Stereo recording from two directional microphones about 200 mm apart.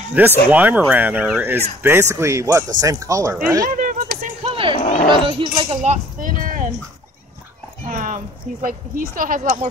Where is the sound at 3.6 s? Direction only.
45° right (ahead or behind).